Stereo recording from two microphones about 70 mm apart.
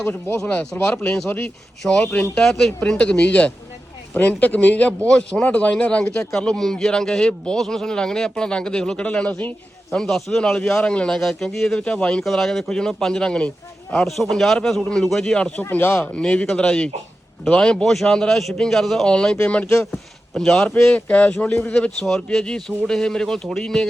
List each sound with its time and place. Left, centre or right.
0.3 s a man's voice: centre
2.3 s a man's voice: centre
9.9 s a man's voice: centre
10.6 s a man's voice: left
12.2 s a man's voice: centre
15.7 s speech: left
16.1 s a man's voice: centre
19.6 s speech: left
19.9 s speech: centre
20.9 s a man's voice: centre